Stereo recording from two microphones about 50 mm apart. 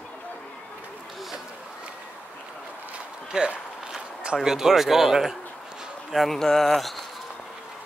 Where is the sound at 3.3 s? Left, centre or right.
Centre.